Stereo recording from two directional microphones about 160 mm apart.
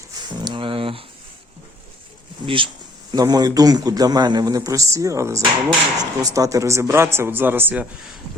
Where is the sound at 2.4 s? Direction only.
30° right (ahead or behind); by 7.9 s 10° right (ahead or behind).